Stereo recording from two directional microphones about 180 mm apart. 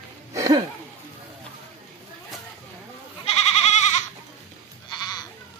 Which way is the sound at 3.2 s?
35° left (ahead or behind).